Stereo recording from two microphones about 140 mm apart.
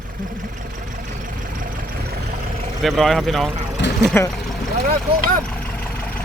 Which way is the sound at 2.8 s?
Centre (ahead or behind).